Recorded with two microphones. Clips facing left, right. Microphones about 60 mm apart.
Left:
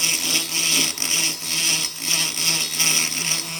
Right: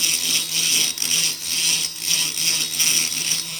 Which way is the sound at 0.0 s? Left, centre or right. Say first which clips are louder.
Left 2 dB; left.